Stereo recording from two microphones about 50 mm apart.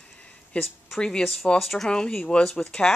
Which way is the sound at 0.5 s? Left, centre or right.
Left.